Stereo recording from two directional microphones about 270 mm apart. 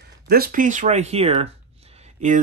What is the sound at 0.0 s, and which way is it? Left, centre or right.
Speech, right.